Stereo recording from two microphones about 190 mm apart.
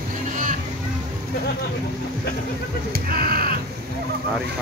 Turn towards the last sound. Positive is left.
turn(degrees=-50)  # may be behind; listen again after turning